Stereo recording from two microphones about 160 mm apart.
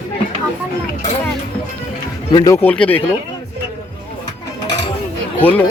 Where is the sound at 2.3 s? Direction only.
20° left (ahead or behind).